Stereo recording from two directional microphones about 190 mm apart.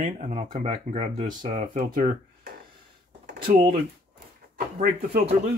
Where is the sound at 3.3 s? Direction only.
45° right (ahead or behind).